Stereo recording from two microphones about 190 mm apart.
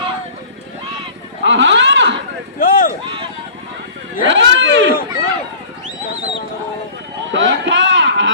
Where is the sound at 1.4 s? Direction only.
75° right (ahead or behind).